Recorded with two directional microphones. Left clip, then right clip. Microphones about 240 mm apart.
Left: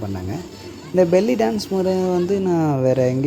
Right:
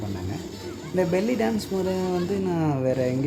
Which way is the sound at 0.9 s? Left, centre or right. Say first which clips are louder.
Left 8 dB; left.